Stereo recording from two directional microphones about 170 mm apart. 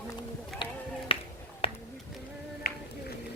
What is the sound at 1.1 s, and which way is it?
Finger snapping, 30° left (ahead or behind).